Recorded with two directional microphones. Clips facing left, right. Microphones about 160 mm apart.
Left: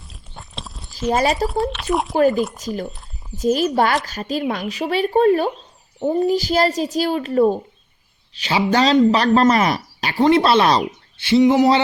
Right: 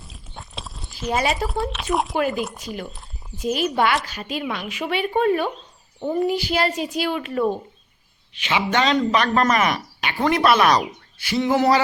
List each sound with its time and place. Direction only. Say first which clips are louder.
0.0 s biting: right 1 dB; centre (ahead or behind)
1.1 s speech: left 4 dB; 40° left (ahead or behind)
1.5 s speech: left 4 dB; centre (ahead or behind)
2.6 s speech: left 6 dB; 40° left (ahead or behind); by 11.8 s 20° left (ahead or behind)